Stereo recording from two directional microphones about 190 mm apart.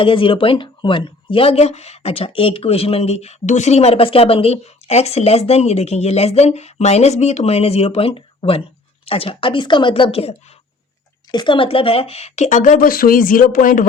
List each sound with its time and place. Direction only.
0.0 s a woman's voice: 30° left (ahead or behind); by 13.8 s 45° left (ahead or behind)